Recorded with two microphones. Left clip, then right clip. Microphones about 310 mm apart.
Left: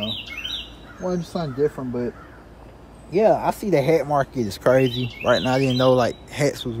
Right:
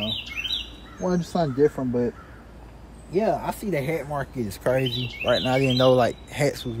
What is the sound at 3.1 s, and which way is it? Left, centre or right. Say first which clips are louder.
Speech: left 6 dB; centre.